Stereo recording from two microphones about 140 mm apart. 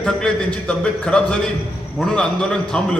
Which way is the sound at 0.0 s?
5° left (ahead or behind).